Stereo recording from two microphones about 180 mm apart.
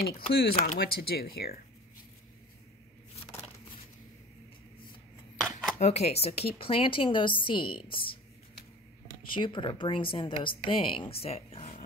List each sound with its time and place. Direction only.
0.6 s speech: 55° left (ahead or behind)
5.4 s a sound: centre (ahead or behind)
5.8 s speech: 35° left (ahead or behind)
9.2 s speech: 25° left (ahead or behind)